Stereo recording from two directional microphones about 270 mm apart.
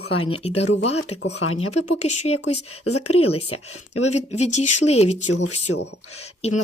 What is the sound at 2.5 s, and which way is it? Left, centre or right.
Speech, left.